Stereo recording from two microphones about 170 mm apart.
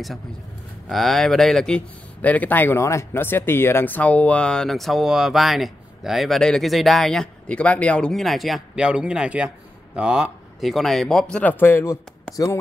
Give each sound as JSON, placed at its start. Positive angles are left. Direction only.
{"t": 0.8, "sound": "speech", "side_deg": 0}